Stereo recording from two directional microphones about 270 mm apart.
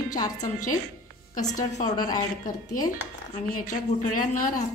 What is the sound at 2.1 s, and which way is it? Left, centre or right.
Speech, left.